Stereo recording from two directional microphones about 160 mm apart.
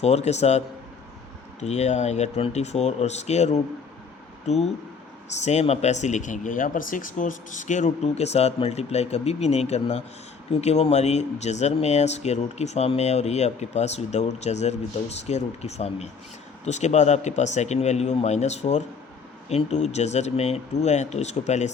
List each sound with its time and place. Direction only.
0.0 s speech: 40° left (ahead or behind)
1.6 s speech: 45° left (ahead or behind)